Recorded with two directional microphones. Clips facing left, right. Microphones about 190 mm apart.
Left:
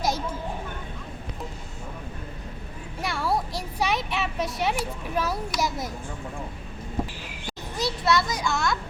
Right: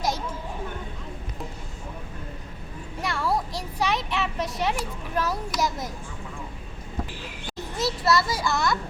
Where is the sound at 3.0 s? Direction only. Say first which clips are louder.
Even; 5° left (ahead or behind).